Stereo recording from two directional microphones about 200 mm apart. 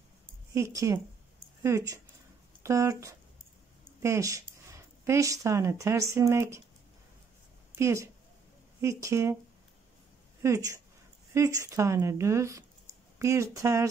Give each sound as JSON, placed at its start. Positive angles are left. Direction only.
{"t": 0.6, "sound": "speech", "side_deg": -15}
{"t": 7.7, "sound": "speech", "side_deg": -15}
{"t": 10.4, "sound": "speech", "side_deg": -15}